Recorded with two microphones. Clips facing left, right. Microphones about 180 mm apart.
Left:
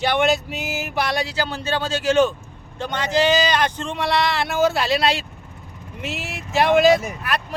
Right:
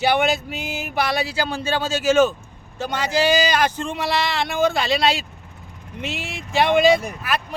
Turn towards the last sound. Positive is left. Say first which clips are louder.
# even
turn(degrees=0)  # may be behind; listen again after turning